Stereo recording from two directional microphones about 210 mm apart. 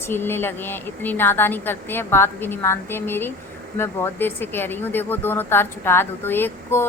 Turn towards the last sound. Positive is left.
turn(degrees=10)  # may be behind; listen again after turning